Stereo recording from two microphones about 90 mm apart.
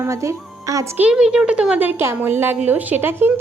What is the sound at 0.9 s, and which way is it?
A woman's voice, 10° right (ahead or behind).